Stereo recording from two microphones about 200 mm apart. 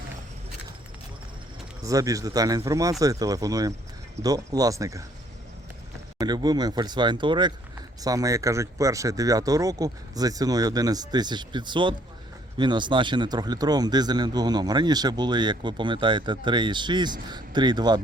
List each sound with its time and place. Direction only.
1.8 s speech: 15° right (ahead or behind)
6.1 s speech: 20° right (ahead or behind)